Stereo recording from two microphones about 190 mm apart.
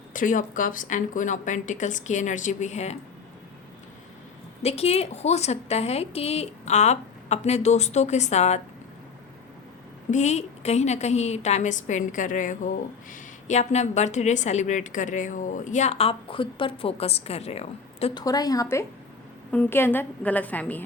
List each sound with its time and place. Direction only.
0.1 s a woman's voice: 45° left (ahead or behind)
4.6 s a woman's voice: 35° left (ahead or behind)
10.1 s a woman's voice: 40° left (ahead or behind)
18.2 s a woman's voice: 20° left (ahead or behind)